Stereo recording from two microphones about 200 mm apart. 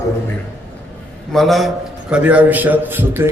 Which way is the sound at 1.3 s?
Centre (ahead or behind).